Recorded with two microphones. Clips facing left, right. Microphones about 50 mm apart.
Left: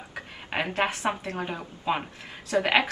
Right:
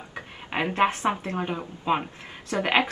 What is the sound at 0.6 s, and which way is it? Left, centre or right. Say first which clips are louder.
A woman's voice: right 4 dB; centre.